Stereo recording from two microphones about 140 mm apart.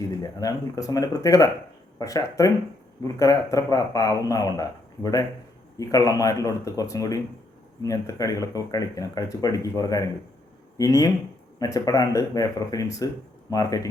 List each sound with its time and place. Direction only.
0.2 s speech: 25° left (ahead or behind)